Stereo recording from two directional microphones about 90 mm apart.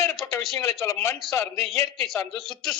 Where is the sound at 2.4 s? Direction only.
Centre (ahead or behind).